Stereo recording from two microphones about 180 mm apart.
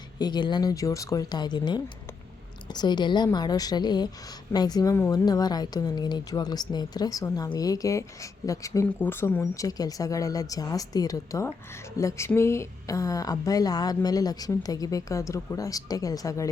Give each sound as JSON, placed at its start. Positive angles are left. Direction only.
{"t": 0.2, "sound": "a woman's voice", "side_deg": 25}